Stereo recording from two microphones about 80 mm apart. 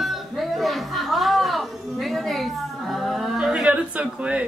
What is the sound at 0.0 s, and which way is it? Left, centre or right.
Music, centre.